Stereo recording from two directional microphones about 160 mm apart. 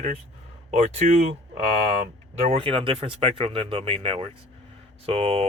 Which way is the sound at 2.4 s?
40° right (ahead or behind).